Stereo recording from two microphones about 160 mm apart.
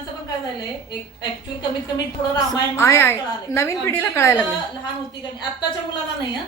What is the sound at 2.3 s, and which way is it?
A woman's voice, 20° left (ahead or behind).